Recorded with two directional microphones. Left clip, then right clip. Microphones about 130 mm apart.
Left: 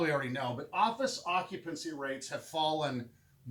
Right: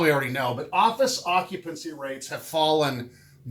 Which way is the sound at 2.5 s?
35° right (ahead or behind).